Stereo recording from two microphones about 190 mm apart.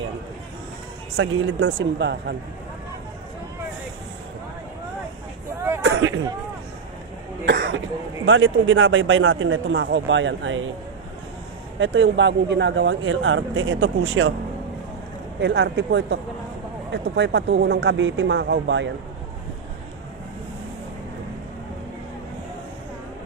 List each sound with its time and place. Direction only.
1.1 s a man's voice: 90° right; by 2.3 s 65° right (ahead or behind)
5.8 s a sound: 90° right
7.4 s speech: 65° right (ahead or behind)
8.3 s a man's voice: 90° right
11.8 s a man's voice: 75° right (ahead or behind); by 14.3 s 90° right
15.4 s speech: 60° right (ahead or behind)